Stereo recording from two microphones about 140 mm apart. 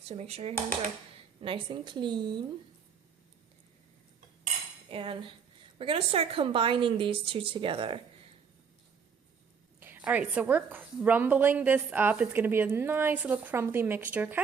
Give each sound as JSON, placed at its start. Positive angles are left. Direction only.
{"t": 0.0, "sound": "speech", "side_deg": -50}
{"t": 1.4, "sound": "speech", "side_deg": -40}
{"t": 4.9, "sound": "cutlery", "side_deg": -40}
{"t": 5.8, "sound": "speech", "side_deg": -40}
{"t": 9.8, "sound": "a woman's voice", "side_deg": -10}